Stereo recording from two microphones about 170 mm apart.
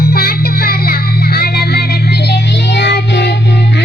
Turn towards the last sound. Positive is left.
turn(degrees=80)